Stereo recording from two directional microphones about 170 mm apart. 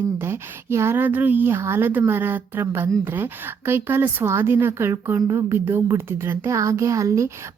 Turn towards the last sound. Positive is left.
turn(degrees=-20)  # may be behind; listen again after turning